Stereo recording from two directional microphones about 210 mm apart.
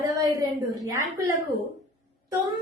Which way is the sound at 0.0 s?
15° right (ahead or behind).